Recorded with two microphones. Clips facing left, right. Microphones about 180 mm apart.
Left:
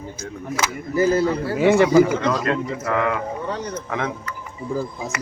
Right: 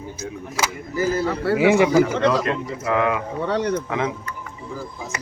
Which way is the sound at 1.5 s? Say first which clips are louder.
Left 1 dB; 10° right (ahead or behind).